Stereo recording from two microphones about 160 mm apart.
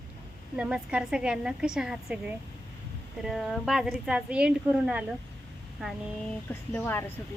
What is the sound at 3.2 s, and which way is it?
A woman's voice, centre (ahead or behind).